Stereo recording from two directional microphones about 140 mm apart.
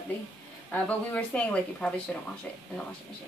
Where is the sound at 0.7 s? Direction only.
10° left (ahead or behind).